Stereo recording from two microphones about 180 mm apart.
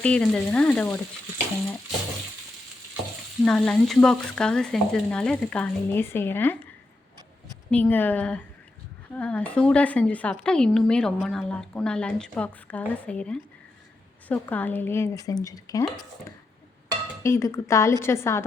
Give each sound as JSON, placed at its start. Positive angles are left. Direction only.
{"t": 0.0, "sound": "speech", "side_deg": 5}
{"t": 3.4, "sound": "a woman's voice", "side_deg": 5}
{"t": 7.7, "sound": "a woman's voice", "side_deg": 10}
{"t": 17.2, "sound": "speech", "side_deg": 15}